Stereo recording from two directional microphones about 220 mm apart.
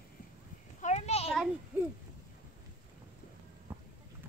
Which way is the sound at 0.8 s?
30° left (ahead or behind).